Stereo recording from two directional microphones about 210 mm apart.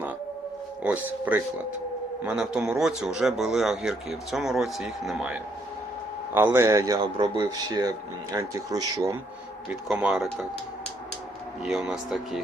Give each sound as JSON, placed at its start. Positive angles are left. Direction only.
{"t": 0.8, "sound": "a man's voice", "side_deg": -5}
{"t": 9.9, "sound": "speech", "side_deg": 0}
{"t": 11.6, "sound": "speech", "side_deg": -5}